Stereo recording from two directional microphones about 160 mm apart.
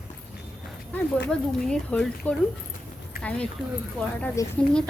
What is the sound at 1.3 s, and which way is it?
A woman's voice, 5° left (ahead or behind).